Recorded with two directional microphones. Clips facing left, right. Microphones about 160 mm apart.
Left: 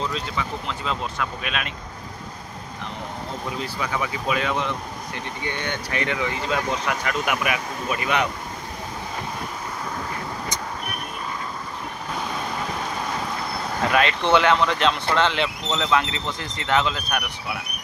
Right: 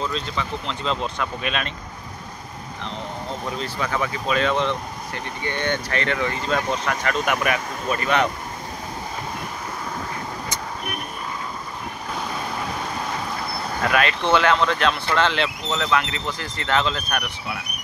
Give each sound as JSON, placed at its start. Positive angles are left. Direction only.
{"t": 0.1, "sound": "speech", "side_deg": 5}
{"t": 3.6, "sound": "speech", "side_deg": 10}
{"t": 12.2, "sound": "vehicle", "side_deg": 0}
{"t": 13.9, "sound": "speech", "side_deg": 20}